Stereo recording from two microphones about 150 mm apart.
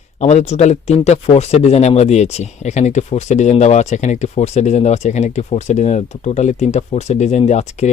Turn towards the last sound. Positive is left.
turn(degrees=50)  # may be behind; listen again after turning